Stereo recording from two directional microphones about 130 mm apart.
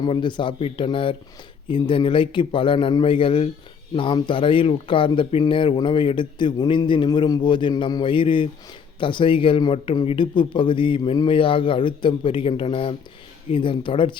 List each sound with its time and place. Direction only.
0.0 s a man's voice: 35° left (ahead or behind)